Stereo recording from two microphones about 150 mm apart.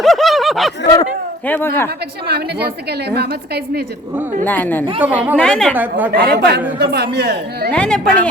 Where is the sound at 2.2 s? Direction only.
90° right.